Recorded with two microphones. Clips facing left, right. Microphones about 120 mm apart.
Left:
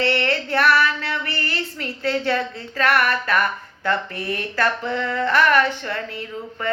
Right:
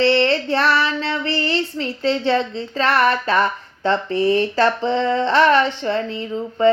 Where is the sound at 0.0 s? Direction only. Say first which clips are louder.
Right 6 dB; 25° right (ahead or behind).